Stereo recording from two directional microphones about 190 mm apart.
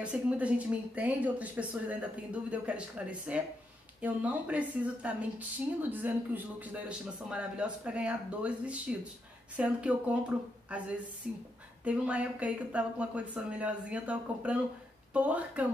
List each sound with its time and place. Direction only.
0.0 s a man's voice: 5° right (ahead or behind)